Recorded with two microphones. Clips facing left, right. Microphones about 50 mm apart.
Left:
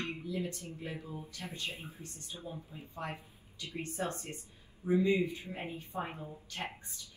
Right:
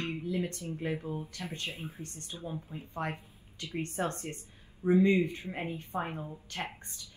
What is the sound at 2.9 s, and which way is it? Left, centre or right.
Speech, right.